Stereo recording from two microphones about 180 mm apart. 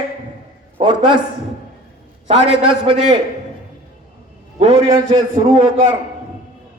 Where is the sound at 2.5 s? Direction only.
30° right (ahead or behind).